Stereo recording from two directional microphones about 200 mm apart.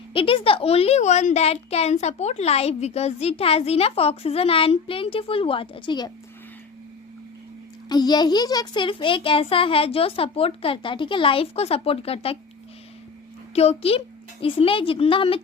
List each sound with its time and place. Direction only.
0.1 s a woman's voice: 25° left (ahead or behind)
7.9 s a woman's voice: 20° left (ahead or behind)
13.6 s a child's voice: 30° left (ahead or behind)